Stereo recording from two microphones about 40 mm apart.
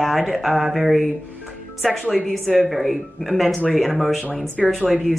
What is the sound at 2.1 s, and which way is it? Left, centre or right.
Speech, centre.